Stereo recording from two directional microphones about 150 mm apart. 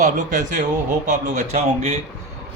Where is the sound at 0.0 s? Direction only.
55° right (ahead or behind).